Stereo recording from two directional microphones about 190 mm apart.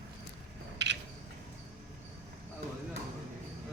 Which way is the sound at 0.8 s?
65° right (ahead or behind).